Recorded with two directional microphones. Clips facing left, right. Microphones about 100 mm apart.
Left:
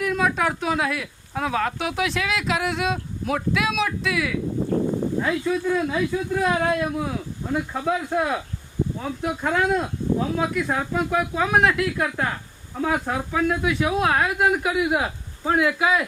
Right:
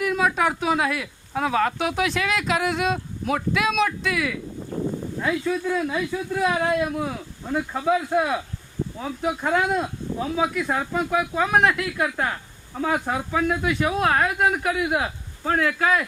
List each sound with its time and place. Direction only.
0.0 s speech: centre (ahead or behind)
4.7 s a sound: 55° left (ahead or behind)
5.2 s speech: centre (ahead or behind)